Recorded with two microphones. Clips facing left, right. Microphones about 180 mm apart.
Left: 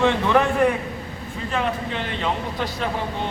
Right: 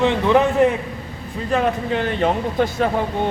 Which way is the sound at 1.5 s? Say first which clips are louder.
Right 6 dB; 45° right (ahead or behind).